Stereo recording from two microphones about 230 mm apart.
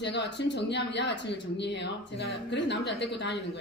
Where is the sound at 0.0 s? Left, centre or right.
Left.